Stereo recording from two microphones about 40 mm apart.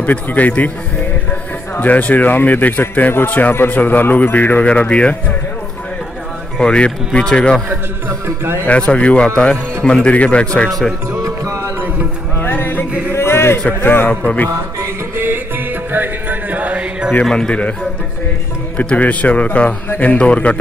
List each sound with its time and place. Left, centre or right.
0.0 s speech: left
1.8 s speech: left
4.6 s speech: left
6.6 s speech: left
8.6 s speech: left
12.4 s music: left
13.1 s music: left
14.0 s speech: left
15.1 s music: right
17.2 s speech: left
18.8 s speech: left